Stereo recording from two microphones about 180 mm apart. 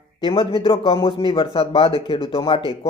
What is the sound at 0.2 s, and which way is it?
Speech, 30° left (ahead or behind).